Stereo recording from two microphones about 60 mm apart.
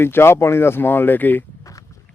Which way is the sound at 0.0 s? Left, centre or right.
Left.